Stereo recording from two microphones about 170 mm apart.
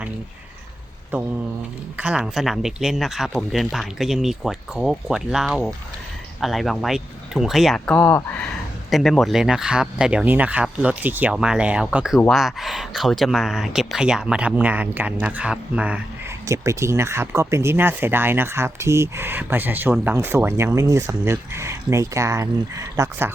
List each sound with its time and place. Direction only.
1.1 s speech: 10° right (ahead or behind); by 8.4 s 10° left (ahead or behind)
8.9 s speech: centre (ahead or behind)
16.5 s speech: 15° right (ahead or behind)